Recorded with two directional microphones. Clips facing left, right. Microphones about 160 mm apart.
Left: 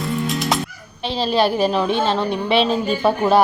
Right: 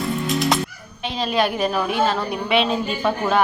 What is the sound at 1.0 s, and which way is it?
A woman's voice, 30° left (ahead or behind).